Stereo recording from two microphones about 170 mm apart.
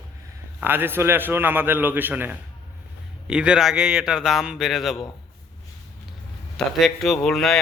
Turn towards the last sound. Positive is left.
turn(degrees=0)  # may be behind; listen again after turning